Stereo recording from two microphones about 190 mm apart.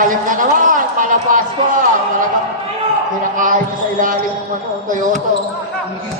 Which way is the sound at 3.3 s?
45° right (ahead or behind).